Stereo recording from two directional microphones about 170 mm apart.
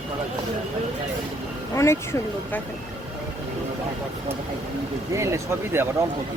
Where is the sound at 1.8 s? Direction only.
15° left (ahead or behind).